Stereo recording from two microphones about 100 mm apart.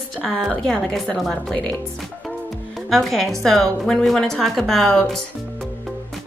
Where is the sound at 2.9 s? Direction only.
Centre (ahead or behind).